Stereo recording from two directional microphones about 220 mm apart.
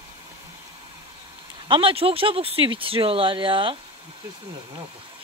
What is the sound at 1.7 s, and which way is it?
Speech, 25° right (ahead or behind).